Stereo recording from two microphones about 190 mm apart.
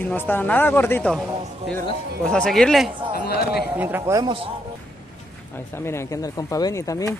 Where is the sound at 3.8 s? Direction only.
15° right (ahead or behind).